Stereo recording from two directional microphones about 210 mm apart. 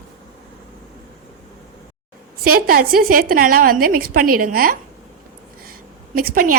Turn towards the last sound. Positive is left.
turn(degrees=-40)  # may be behind; listen again after turning